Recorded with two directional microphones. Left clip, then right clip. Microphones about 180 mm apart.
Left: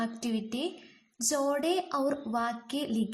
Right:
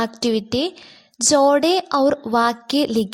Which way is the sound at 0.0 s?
40° right (ahead or behind).